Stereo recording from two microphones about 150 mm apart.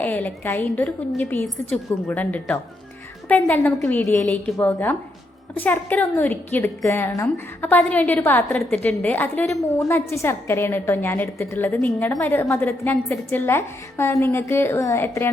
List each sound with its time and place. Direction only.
0.0 s a woman's voice: 10° left (ahead or behind)